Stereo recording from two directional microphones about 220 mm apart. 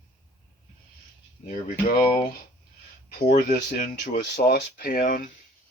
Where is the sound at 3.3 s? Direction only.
40° left (ahead or behind).